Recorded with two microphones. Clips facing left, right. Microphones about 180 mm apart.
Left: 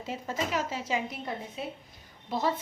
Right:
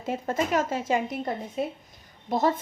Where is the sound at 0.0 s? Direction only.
50° right (ahead or behind).